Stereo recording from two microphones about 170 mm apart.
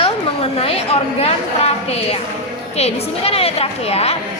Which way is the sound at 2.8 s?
35° left (ahead or behind).